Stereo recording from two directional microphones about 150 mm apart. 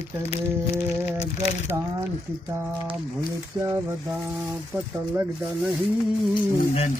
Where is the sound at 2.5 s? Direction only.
15° right (ahead or behind).